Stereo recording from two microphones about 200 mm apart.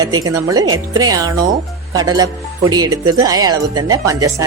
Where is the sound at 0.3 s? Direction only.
15° right (ahead or behind).